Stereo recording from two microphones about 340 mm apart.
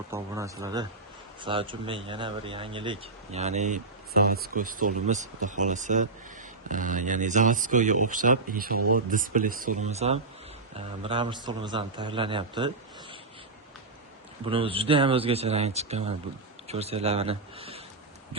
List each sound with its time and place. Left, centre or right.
0.1 s a man's voice: centre
14.4 s a man's voice: centre